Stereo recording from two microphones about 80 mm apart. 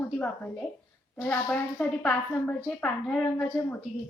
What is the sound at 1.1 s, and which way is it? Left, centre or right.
A woman's voice, centre.